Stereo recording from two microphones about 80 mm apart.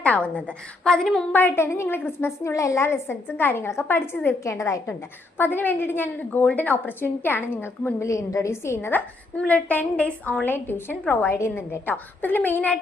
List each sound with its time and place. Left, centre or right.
0.0 s a woman's voice: centre
1.3 s a woman's voice: left
4.4 s a woman's voice: left
5.4 s a woman's voice: left